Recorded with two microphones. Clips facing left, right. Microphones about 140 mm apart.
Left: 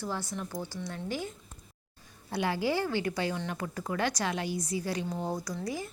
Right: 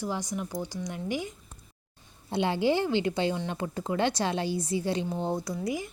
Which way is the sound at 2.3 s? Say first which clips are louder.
Right 4 dB; 25° right (ahead or behind).